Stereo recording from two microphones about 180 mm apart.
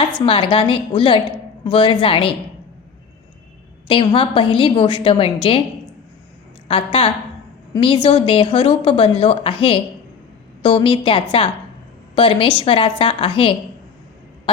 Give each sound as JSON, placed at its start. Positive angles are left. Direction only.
{"t": 0.2, "sound": "a woman's voice", "side_deg": 30}
{"t": 3.8, "sound": "a woman's voice", "side_deg": 30}
{"t": 6.7, "sound": "a woman's voice", "side_deg": 30}